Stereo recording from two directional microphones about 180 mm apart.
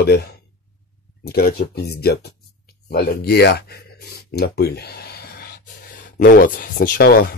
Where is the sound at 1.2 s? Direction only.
60° left (ahead or behind).